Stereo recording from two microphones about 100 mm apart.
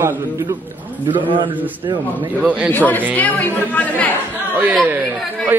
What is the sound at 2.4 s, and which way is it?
Speech, 15° right (ahead or behind).